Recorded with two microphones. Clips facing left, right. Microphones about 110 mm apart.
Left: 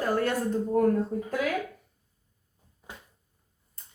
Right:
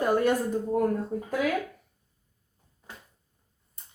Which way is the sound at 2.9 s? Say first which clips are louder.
Left 1 dB; 15° left (ahead or behind).